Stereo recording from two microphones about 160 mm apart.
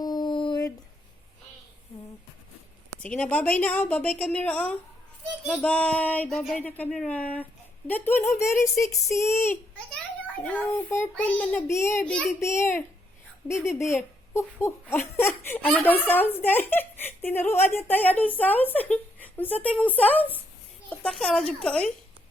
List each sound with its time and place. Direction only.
0.0 s a sound: 25° left (ahead or behind)
3.0 s speech: 5° left (ahead or behind)
12.0 s speech: 5° left (ahead or behind)
12.4 s speech: 15° left (ahead or behind)